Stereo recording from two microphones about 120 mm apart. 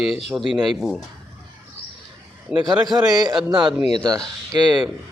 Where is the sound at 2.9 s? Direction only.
35° right (ahead or behind).